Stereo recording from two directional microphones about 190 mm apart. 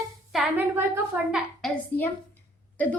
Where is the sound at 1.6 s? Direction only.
Centre (ahead or behind).